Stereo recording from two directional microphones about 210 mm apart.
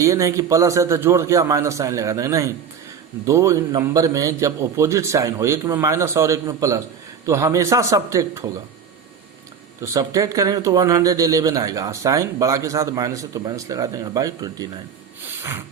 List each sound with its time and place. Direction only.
0.0 s speech: 15° right (ahead or behind)
9.8 s speech: 15° right (ahead or behind)